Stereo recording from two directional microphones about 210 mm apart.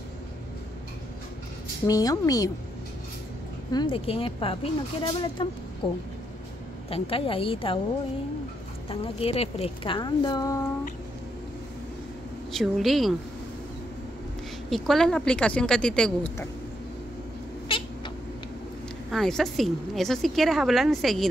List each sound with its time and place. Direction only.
1.9 s a woman's voice: 15° left (ahead or behind)
3.7 s a woman's voice: 25° left (ahead or behind)
6.9 s a woman's voice: 25° left (ahead or behind)
8.8 s a woman's voice: 25° left (ahead or behind)
12.5 s a woman's voice: centre (ahead or behind)
14.7 s a woman's voice: centre (ahead or behind)
17.6 s cat: 25° left (ahead or behind)
19.0 s a woman's voice: centre (ahead or behind)